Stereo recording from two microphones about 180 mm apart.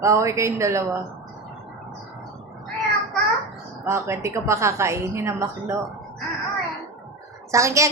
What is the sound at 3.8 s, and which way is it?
A woman's voice, 15° right (ahead or behind).